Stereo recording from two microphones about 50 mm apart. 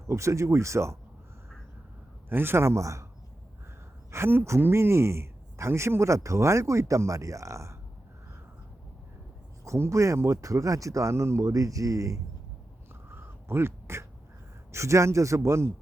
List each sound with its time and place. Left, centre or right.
0.1 s speech: right
2.3 s a man's voice: right
4.1 s speech: right
9.6 s speech: right
13.1 s quack: right
14.7 s speech: right